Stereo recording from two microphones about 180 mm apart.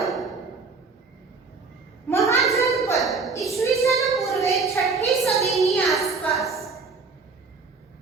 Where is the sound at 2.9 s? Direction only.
Centre (ahead or behind).